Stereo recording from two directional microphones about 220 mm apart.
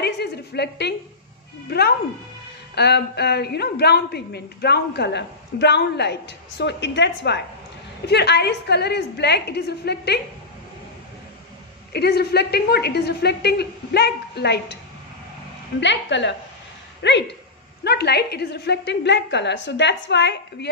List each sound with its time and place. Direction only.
0.0 s a sound: 50° left (ahead or behind)
1.7 s a woman's voice: 45° left (ahead or behind)
11.9 s a woman's voice: 45° left (ahead or behind)
15.8 s a woman's voice: 55° left (ahead or behind)